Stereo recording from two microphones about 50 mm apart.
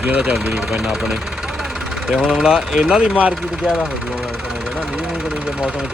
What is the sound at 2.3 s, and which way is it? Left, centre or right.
Speech, centre.